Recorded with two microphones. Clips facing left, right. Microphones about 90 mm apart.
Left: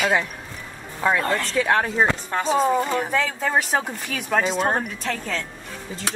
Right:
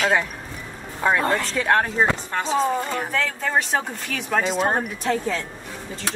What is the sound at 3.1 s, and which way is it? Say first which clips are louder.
Speech: left 2 dB; 15° left (ahead or behind).